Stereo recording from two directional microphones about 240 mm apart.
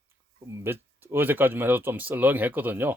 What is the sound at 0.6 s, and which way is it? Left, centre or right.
Speech, centre.